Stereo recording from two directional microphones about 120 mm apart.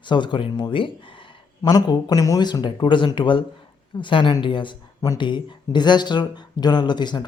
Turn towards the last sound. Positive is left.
turn(degrees=40)  # may be behind; listen again after turning